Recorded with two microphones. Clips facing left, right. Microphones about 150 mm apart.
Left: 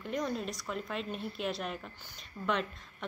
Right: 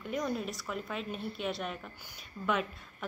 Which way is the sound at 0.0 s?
5° right (ahead or behind).